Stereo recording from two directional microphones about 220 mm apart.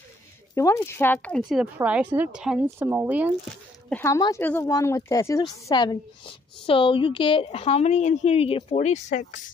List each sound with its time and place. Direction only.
0.6 s speech: 10° left (ahead or behind); by 3.3 s 10° right (ahead or behind)
3.9 s a woman's voice: 15° left (ahead or behind); by 9.4 s 35° left (ahead or behind)